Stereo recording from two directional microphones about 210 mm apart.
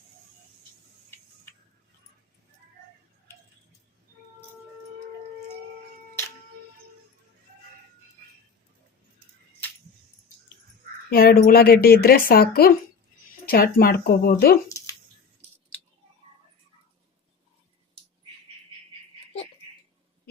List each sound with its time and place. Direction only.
11.1 s speech: 45° left (ahead or behind)